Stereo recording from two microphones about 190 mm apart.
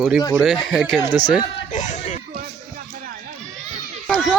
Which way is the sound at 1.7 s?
40° left (ahead or behind).